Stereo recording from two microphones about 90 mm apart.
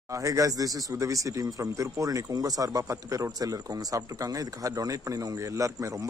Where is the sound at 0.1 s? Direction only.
40° right (ahead or behind).